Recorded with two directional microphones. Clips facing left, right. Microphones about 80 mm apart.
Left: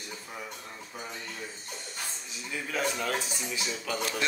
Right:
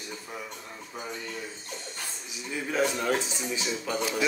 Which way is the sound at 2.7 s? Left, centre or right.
Centre.